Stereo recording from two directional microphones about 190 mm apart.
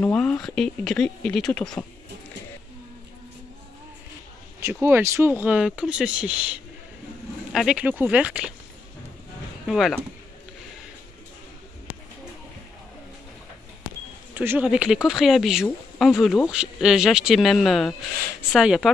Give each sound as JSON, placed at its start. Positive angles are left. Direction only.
{"t": 0.0, "sound": "speech", "side_deg": 5}
{"t": 4.8, "sound": "speech", "side_deg": -15}
{"t": 9.7, "sound": "speech", "side_deg": 0}
{"t": 14.3, "sound": "speech", "side_deg": -10}